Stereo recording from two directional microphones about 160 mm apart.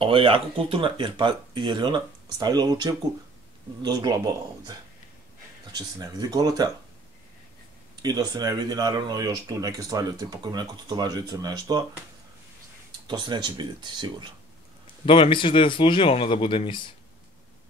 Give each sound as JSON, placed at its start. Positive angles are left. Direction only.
{"t": 0.0, "sound": "speech", "side_deg": -35}
{"t": 7.9, "sound": "speech", "side_deg": -25}
{"t": 13.0, "sound": "speech", "side_deg": -30}
{"t": 15.0, "sound": "speech", "side_deg": 35}